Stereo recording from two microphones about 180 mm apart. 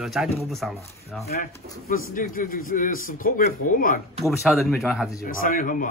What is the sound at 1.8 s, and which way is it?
A man's voice, 50° left (ahead or behind).